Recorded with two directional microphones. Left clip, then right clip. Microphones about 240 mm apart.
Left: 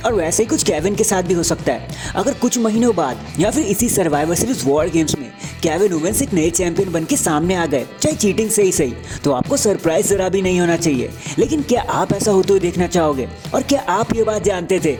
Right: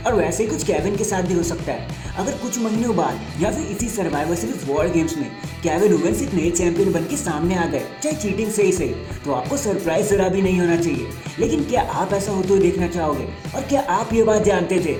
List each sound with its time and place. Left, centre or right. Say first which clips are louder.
0.0 s a woman's voice: left 2 dB; left